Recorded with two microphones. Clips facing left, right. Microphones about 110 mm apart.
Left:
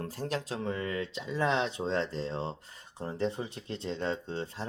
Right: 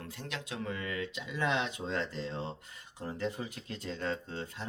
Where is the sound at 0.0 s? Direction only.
40° left (ahead or behind).